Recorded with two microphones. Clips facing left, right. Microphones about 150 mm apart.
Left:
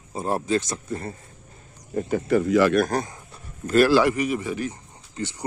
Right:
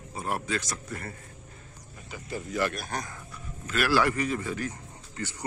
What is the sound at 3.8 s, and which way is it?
A man's voice, 20° left (ahead or behind).